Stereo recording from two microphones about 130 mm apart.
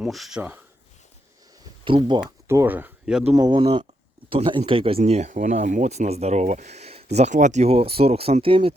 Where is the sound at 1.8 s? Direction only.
40° right (ahead or behind).